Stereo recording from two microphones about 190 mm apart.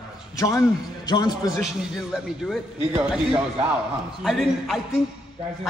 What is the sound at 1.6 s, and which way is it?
A man's voice, centre (ahead or behind).